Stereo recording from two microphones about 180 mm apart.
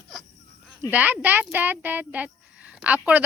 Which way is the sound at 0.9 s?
10° right (ahead or behind).